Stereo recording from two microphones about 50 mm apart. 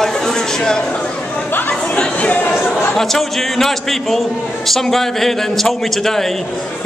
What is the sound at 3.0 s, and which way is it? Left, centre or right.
A man's voice, centre.